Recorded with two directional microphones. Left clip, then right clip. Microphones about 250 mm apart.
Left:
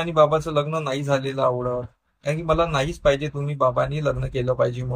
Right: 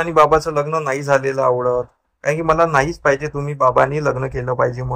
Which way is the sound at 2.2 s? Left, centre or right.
Right.